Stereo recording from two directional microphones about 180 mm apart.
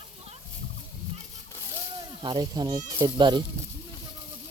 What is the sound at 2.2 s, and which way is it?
Speech, 25° right (ahead or behind).